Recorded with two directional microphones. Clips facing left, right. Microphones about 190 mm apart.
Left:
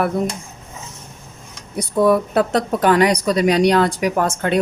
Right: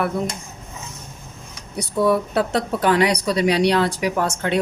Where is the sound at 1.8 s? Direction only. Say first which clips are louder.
Left 3 dB; 50° left (ahead or behind).